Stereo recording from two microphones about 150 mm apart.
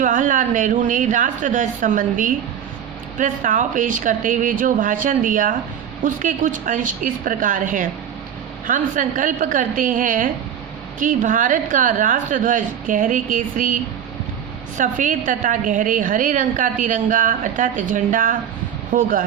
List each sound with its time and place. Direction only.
0.0 s a woman's voice: 60° right (ahead or behind)
14.8 s a woman's voice: 60° right (ahead or behind)